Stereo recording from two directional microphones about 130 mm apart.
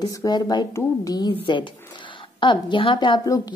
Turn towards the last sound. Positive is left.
turn(degrees=40)  # may be behind; listen again after turning